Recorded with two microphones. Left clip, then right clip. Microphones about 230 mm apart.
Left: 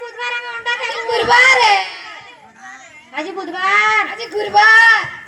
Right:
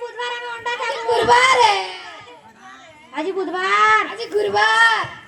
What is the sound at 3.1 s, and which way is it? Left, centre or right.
Children playing, right.